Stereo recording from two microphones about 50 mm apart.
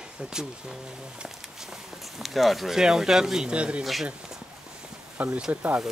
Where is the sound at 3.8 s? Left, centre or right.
Centre.